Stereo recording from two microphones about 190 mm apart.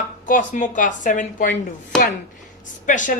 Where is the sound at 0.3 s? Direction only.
45° left (ahead or behind).